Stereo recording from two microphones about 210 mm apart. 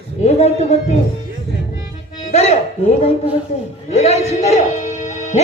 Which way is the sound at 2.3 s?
30° left (ahead or behind).